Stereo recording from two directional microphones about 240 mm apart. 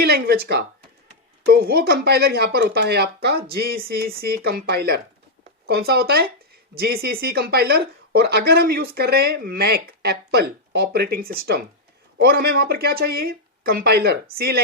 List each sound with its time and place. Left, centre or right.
0.0 s speech: right